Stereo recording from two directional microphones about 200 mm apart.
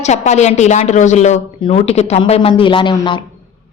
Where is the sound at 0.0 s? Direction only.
35° left (ahead or behind).